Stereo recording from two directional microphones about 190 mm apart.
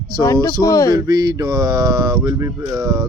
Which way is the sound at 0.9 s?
20° right (ahead or behind).